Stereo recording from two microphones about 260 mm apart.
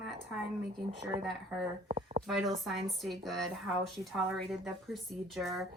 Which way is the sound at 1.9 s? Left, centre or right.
Right.